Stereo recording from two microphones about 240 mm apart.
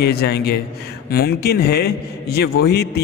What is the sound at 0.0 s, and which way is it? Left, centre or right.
A man's voice, left.